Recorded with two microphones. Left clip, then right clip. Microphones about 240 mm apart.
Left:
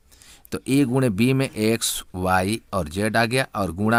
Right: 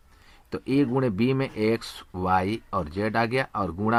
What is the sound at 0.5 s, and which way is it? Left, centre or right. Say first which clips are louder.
Speech: left 3 dB; left.